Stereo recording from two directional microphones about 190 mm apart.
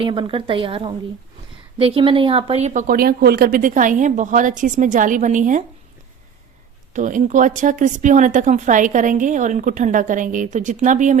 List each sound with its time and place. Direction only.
0.0 s a woman's voice: 25° right (ahead or behind)
6.9 s speech: 40° right (ahead or behind)